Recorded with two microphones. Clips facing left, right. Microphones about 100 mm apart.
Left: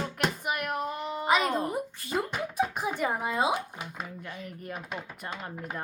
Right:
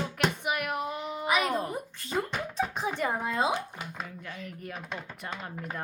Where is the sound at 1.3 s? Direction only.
30° left (ahead or behind).